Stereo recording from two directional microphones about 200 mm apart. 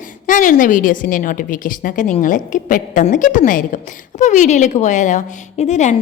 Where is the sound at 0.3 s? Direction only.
40° left (ahead or behind).